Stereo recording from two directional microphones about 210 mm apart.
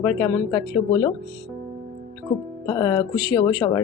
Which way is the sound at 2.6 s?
15° left (ahead or behind).